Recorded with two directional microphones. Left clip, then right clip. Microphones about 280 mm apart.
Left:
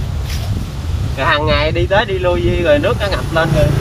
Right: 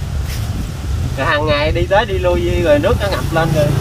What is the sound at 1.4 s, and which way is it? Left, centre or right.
Speech, right.